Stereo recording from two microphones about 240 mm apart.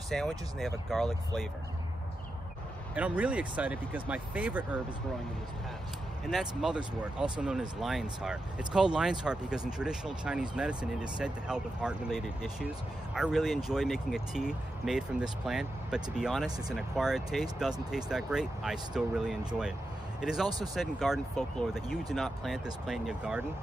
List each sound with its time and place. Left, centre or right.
0.1 s speech: centre
2.9 s speech: centre
6.2 s speech: centre
20.4 s speech: centre
20.7 s speech: centre